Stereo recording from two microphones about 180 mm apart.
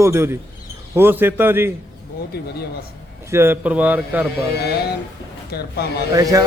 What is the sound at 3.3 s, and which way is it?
Speech, 15° right (ahead or behind).